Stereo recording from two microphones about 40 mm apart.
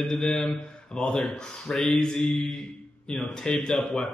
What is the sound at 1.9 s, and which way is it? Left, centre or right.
Speech, left.